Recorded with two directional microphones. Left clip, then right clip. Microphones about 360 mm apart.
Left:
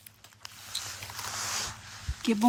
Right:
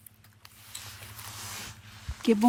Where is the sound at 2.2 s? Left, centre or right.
Centre.